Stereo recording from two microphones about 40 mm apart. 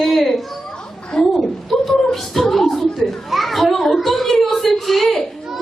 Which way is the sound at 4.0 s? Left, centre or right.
Centre.